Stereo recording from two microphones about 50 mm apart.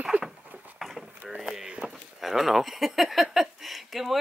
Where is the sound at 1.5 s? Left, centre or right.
Centre.